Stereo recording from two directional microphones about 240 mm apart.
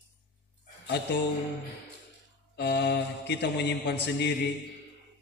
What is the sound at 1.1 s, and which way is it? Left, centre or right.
Mantra, left.